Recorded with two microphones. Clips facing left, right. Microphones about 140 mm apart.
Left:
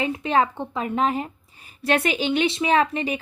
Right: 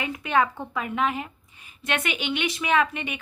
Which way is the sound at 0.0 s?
30° left (ahead or behind).